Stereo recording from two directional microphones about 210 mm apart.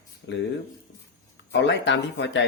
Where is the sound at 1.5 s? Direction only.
55° left (ahead or behind).